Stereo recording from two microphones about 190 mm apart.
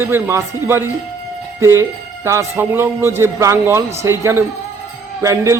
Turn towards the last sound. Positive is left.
turn(degrees=-15)  # may be behind; listen again after turning